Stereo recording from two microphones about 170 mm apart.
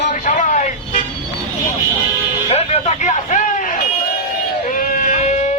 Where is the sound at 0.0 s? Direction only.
50° left (ahead or behind).